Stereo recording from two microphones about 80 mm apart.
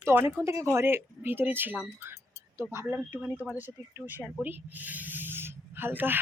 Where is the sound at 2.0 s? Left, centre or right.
Right.